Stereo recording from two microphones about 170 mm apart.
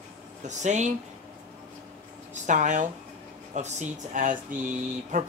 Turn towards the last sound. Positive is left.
turn(degrees=-50)  # may be behind; listen again after turning